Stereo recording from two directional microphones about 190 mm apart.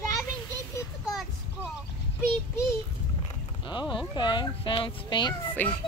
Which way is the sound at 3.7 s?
25° left (ahead or behind).